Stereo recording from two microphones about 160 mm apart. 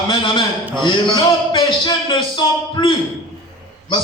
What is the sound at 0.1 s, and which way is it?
A man's voice, 30° left (ahead or behind).